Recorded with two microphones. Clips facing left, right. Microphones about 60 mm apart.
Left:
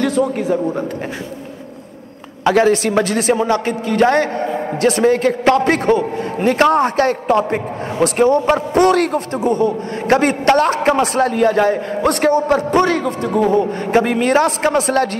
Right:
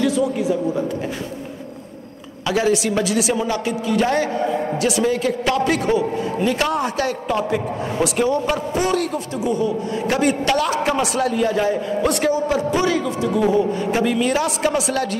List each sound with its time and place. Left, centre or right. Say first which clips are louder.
0.0 s a man's voice: left 2 dB; left
2.4 s a man's voice: left 6 dB; left
8.7 s a man's voice: left 9 dB; left